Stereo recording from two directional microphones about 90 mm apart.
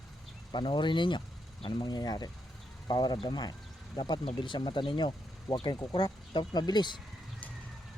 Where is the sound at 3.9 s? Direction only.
65° left (ahead or behind).